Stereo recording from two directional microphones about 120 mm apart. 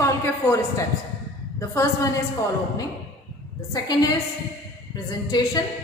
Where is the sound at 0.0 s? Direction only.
25° left (ahead or behind).